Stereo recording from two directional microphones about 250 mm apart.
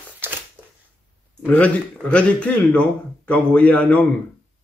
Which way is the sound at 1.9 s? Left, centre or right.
Centre.